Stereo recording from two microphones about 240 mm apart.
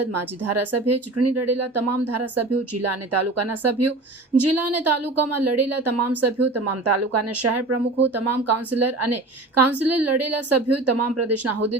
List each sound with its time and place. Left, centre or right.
0.1 s a woman's voice: right